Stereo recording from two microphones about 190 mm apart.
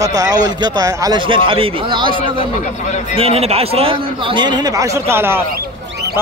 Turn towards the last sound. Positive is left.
turn(degrees=-10)  # may be behind; listen again after turning